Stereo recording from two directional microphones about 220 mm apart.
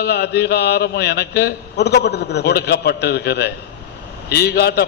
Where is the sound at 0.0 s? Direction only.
50° left (ahead or behind).